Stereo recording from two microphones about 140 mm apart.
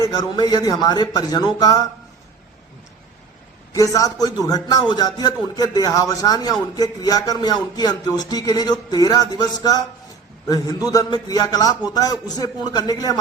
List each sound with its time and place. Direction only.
0.0 s a man's voice: 30° left (ahead or behind)
3.8 s a man's voice: 25° left (ahead or behind)